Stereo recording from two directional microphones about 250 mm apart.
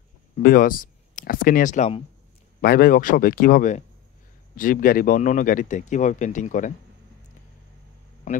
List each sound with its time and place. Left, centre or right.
0.4 s speech: left